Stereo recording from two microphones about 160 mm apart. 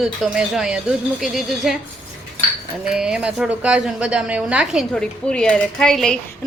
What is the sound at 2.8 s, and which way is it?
A woman's voice, 5° right (ahead or behind).